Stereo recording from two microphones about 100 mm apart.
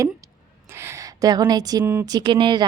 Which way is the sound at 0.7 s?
30° right (ahead or behind).